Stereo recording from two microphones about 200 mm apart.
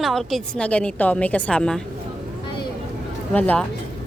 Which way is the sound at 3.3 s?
5° left (ahead or behind).